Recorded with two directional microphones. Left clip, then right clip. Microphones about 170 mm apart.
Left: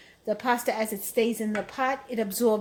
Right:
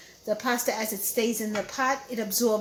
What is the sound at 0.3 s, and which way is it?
Speech, 50° left (ahead or behind).